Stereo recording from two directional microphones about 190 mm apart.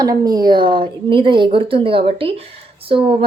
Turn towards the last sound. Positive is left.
turn(degrees=-30)  # may be behind; listen again after turning